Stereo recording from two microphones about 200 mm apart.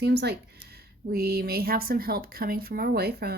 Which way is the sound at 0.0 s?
55° right (ahead or behind).